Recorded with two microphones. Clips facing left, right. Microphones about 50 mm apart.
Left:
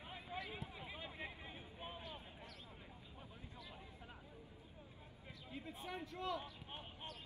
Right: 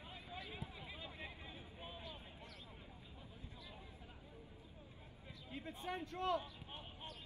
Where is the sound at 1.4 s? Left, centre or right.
Left.